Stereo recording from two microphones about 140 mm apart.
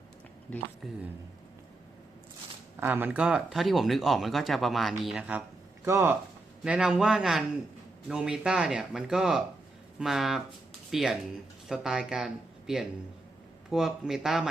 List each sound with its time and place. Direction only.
0.5 s speech: 10° left (ahead or behind)
2.8 s speech: 15° right (ahead or behind)
5.8 s speech: 20° right (ahead or behind)
6.7 s speech: 5° right (ahead or behind)